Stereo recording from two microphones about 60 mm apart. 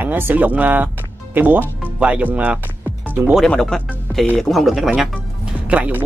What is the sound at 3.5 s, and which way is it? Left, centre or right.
A man's voice, centre.